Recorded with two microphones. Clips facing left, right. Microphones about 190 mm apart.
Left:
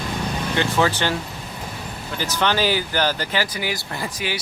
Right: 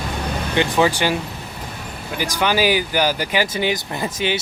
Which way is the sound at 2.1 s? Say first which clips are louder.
Right 2 dB; 10° right (ahead or behind).